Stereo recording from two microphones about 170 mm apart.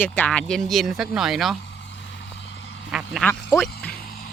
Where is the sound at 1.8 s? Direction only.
90° left.